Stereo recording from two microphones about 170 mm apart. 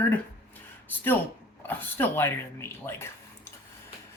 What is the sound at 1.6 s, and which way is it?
Speech, 10° left (ahead or behind).